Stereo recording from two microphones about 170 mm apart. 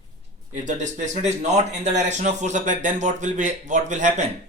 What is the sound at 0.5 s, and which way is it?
Speech, 45° right (ahead or behind).